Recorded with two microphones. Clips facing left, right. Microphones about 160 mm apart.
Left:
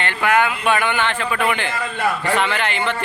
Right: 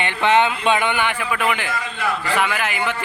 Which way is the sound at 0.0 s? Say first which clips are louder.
Right 1 dB; 20° right (ahead or behind).